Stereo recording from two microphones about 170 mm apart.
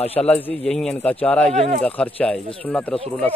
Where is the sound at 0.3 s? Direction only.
10° left (ahead or behind).